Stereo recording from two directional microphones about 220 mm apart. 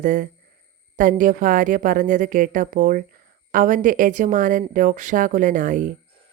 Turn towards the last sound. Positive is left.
turn(degrees=-35)  # may be behind; listen again after turning